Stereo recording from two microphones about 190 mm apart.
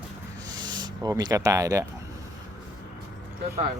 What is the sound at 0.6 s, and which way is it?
Speech, 20° right (ahead or behind).